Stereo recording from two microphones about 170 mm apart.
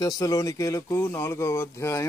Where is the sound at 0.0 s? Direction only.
20° left (ahead or behind).